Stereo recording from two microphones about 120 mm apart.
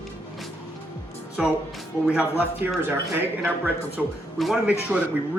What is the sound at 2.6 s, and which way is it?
Speech, 15° right (ahead or behind).